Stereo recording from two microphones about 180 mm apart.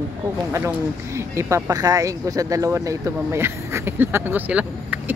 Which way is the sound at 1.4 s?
15° right (ahead or behind).